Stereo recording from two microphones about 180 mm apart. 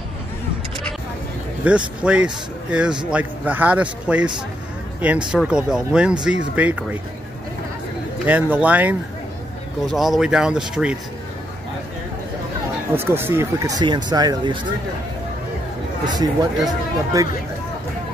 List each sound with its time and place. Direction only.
1.6 s speech: 10° right (ahead or behind)
8.3 s speech: 10° right (ahead or behind)
12.9 s speech: 15° right (ahead or behind)
16.1 s speech: 20° right (ahead or behind)